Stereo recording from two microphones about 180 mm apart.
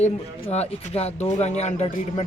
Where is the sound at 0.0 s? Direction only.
35° left (ahead or behind).